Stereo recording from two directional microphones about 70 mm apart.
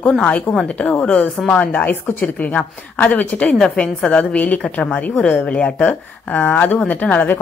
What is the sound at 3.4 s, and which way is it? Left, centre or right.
Speech, centre.